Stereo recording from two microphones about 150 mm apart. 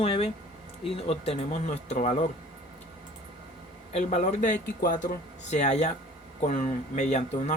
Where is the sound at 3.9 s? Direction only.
45° left (ahead or behind).